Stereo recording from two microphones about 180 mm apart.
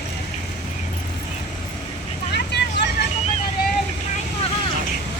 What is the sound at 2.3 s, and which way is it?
Vehicle, 70° left (ahead or behind).